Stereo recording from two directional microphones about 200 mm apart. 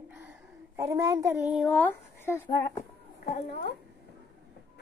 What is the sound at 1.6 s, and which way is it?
Speech, 5° left (ahead or behind).